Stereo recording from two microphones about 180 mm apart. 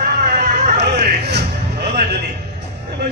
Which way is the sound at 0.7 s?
65° right (ahead or behind).